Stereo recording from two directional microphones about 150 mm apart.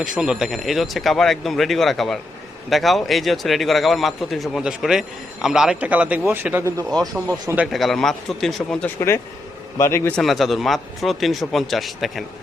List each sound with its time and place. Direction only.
0.0 s a man's voice: 5° right (ahead or behind)
7.7 s a man's voice: centre (ahead or behind)
9.0 s a man's voice: 15° left (ahead or behind)
10.2 s a man's voice: centre (ahead or behind)